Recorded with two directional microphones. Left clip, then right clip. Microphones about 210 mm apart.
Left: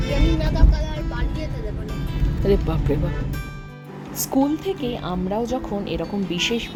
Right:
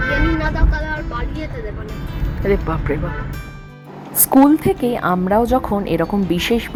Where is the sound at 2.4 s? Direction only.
15° left (ahead or behind).